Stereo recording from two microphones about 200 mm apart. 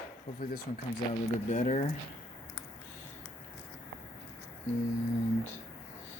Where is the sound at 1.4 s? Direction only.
35° left (ahead or behind).